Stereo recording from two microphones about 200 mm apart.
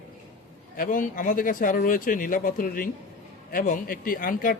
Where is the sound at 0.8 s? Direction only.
40° left (ahead or behind).